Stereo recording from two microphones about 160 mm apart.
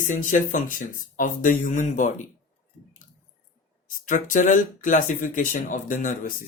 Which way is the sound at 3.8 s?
55° left (ahead or behind).